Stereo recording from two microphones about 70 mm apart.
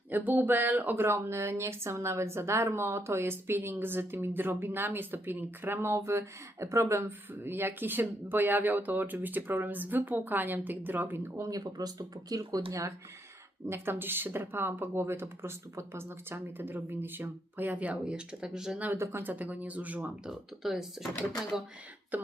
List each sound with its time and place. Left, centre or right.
0.1 s speech: right
11.3 s speech: right
11.6 s speech: right
13.7 s speech: right; by 18.8 s centre
18.8 s speech: right
20.2 s speech: centre
22.1 s speech: right